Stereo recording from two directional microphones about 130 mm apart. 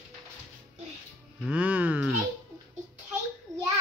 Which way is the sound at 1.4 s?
10° right (ahead or behind).